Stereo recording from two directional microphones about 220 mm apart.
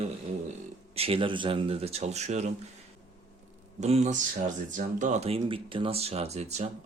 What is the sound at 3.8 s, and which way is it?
Speech, 30° right (ahead or behind).